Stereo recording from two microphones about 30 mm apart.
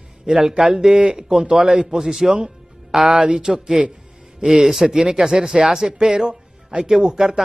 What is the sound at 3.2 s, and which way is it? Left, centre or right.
Speech, right.